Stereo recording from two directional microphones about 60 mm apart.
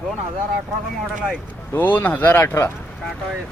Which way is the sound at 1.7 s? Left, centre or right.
Left.